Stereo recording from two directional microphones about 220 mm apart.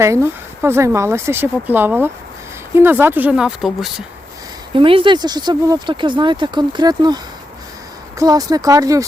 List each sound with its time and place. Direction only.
0.0 s speech: 10° right (ahead or behind)
4.7 s speech: 25° right (ahead or behind)
8.2 s speech: 15° right (ahead or behind)